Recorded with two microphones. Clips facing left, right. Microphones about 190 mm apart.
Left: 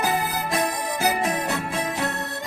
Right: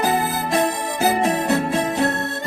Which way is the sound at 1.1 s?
35° right (ahead or behind).